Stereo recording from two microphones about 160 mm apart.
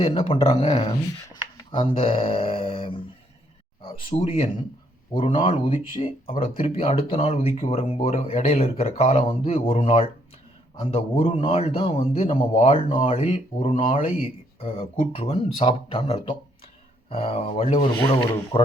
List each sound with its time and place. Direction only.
0.0 s a man's voice: 35° left (ahead or behind)